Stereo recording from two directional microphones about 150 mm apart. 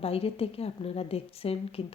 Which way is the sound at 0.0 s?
40° left (ahead or behind).